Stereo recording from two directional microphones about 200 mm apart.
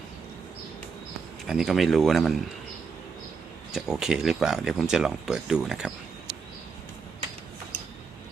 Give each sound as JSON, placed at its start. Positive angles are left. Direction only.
{"t": 1.5, "sound": "speech", "side_deg": 0}
{"t": 3.8, "sound": "speech", "side_deg": 0}